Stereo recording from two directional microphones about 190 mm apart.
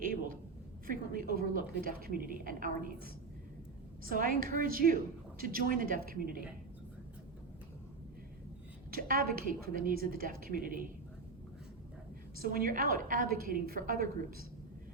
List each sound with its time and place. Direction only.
0.0 s a sound: 45° right (ahead or behind)
0.9 s a woman's voice: 50° right (ahead or behind)
4.1 s a woman's voice: 45° right (ahead or behind)
8.9 s a woman's voice: 50° right (ahead or behind)
12.4 s a woman's voice: 45° right (ahead or behind)